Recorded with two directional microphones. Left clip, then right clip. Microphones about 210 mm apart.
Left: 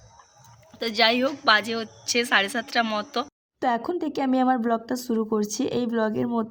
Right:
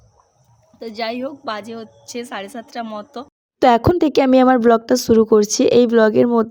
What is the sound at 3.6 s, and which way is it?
Speech, 40° right (ahead or behind).